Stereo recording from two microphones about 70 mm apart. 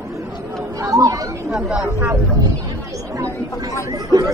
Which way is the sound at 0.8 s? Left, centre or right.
Right.